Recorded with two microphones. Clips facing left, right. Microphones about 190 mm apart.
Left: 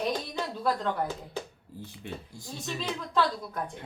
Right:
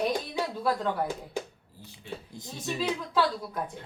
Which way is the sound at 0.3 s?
5° right (ahead or behind).